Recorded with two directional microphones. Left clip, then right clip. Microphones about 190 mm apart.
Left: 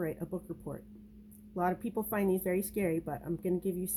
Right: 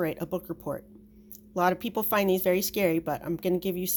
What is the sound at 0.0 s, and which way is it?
A woman's voice, 30° right (ahead or behind).